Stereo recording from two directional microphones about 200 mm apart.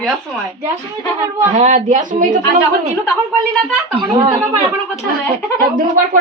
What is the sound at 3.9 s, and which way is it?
Speech, 20° right (ahead or behind).